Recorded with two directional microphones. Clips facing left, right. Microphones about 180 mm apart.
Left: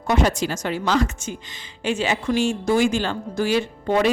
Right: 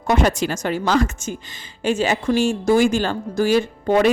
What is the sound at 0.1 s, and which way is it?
Speech, 55° right (ahead or behind).